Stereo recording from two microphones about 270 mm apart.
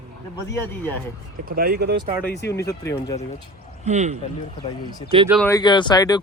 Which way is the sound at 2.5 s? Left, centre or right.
Centre.